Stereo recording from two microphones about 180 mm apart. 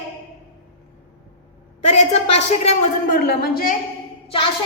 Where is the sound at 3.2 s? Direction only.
60° left (ahead or behind).